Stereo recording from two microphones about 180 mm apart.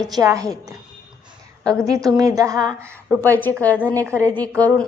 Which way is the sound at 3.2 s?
10° left (ahead or behind).